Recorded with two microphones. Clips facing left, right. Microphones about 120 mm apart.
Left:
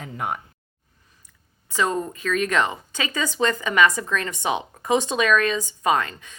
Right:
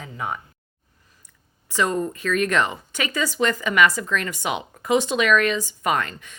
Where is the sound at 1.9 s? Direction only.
25° left (ahead or behind).